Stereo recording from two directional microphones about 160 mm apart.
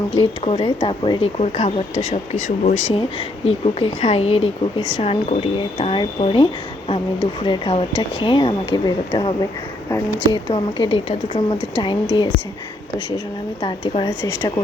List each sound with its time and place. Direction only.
0.1 s a woman's voice: 35° left (ahead or behind)
1.4 s speech: 45° left (ahead or behind)
2.9 s a woman's voice: 35° left (ahead or behind)
10.5 s a woman's voice: 35° left (ahead or behind)
13.6 s a woman's voice: 35° left (ahead or behind)